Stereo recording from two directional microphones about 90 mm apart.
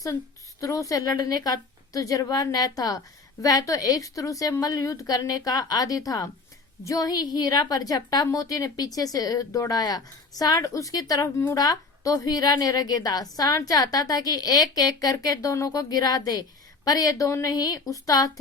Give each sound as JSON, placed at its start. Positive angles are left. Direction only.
{"t": 0.6, "sound": "a woman's voice", "side_deg": 40}
{"t": 11.5, "sound": "a woman's voice", "side_deg": 45}